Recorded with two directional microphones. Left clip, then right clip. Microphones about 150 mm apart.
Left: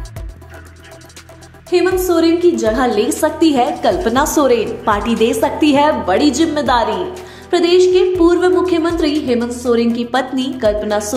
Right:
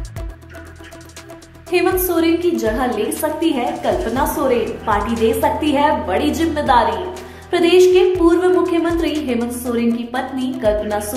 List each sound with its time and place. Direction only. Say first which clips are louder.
1.7 s a woman's voice: left 3 dB; 15° left (ahead or behind)
3.3 s a woman's voice: left 5 dB; 35° left (ahead or behind)
7.5 s a woman's voice: left 1 dB; 20° left (ahead or behind); by 11.0 s 35° left (ahead or behind)